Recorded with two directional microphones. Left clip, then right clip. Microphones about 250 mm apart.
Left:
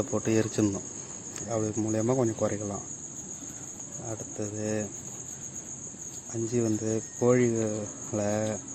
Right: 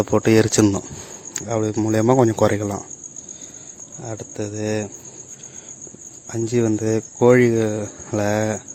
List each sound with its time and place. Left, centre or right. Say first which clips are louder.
0.0 s speech: right 12 dB; right
4.1 s speech: right 8 dB; right
6.3 s speech: right 9 dB; right